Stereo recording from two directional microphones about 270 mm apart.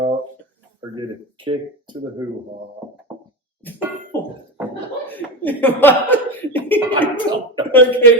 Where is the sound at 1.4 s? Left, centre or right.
Centre.